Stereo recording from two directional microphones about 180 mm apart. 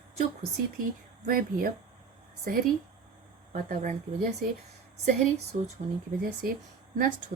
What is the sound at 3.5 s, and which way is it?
Speech, 45° right (ahead or behind).